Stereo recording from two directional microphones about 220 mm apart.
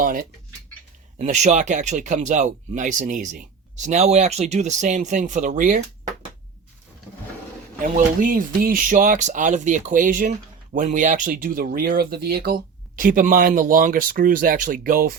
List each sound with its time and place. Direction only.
0.0 s speech: 40° right (ahead or behind)
7.8 s speech: 40° right (ahead or behind)